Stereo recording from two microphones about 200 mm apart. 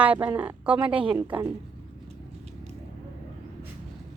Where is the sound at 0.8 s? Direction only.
25° right (ahead or behind).